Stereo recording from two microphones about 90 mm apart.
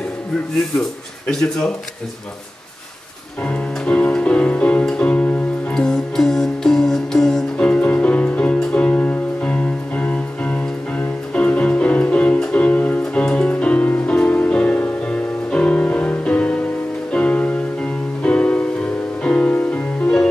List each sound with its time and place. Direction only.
1.3 s speech: 5° left (ahead or behind)
3.4 s music: 15° left (ahead or behind)